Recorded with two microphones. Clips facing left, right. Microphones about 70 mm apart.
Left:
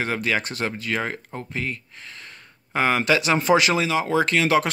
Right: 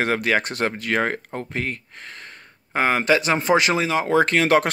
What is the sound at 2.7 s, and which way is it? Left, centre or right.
Speech, right.